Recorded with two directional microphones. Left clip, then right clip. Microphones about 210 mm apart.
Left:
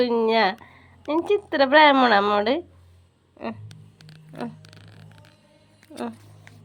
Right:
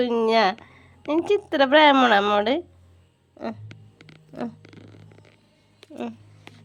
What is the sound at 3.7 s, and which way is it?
Music, 10° left (ahead or behind).